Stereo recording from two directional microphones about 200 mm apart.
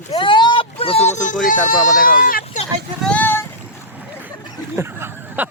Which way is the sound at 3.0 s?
10° left (ahead or behind).